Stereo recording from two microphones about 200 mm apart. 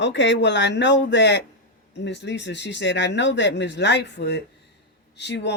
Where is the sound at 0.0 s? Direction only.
60° left (ahead or behind).